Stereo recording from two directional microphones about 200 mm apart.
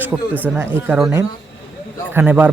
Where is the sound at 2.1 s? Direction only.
10° right (ahead or behind).